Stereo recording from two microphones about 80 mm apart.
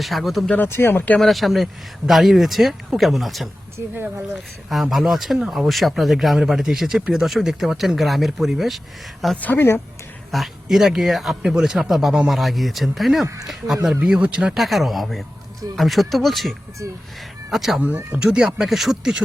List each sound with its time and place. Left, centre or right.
0.0 s speech: centre
0.5 s speech: left
1.2 s speech: centre
3.8 s speech: right
4.7 s speech: centre
9.4 s speech: left
10.3 s speech: centre
13.2 s speech: right
14.0 s speech: centre
16.8 s speech: right
17.5 s speech: centre
17.7 s speech: right; by 19.2 s centre